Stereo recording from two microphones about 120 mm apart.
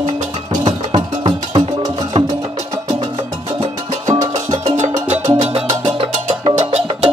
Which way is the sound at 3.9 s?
90° right.